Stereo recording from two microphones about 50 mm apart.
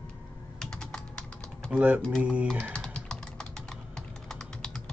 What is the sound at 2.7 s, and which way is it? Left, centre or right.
Typing, centre.